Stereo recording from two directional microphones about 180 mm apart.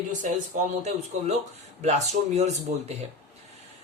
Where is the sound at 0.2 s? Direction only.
40° right (ahead or behind).